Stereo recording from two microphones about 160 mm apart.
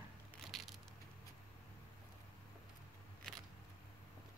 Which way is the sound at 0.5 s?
Centre (ahead or behind).